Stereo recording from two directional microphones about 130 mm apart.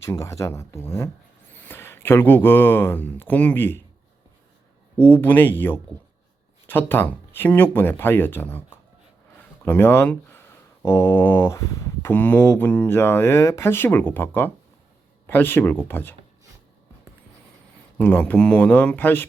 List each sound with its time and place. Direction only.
0.0 s a sound: 20° left (ahead or behind)
1.6 s speech: 15° left (ahead or behind)
5.1 s speech: 15° left (ahead or behind)
10.8 s a sound: 20° left (ahead or behind)
12.1 s speech: 10° left (ahead or behind)
17.9 s speech: 10° left (ahead or behind)